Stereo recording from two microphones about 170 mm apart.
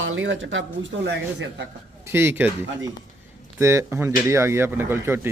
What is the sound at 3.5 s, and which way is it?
Speech, 15° right (ahead or behind).